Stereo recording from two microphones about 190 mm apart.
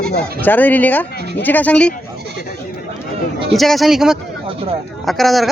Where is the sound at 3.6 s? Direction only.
Centre (ahead or behind).